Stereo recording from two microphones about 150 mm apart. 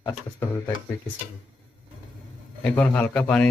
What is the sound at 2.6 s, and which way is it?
Speech, 10° left (ahead or behind).